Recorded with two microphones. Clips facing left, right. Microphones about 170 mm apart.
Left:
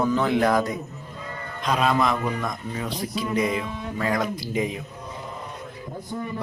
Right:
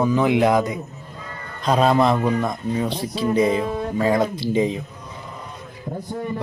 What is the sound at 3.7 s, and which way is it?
Music, 50° right (ahead or behind).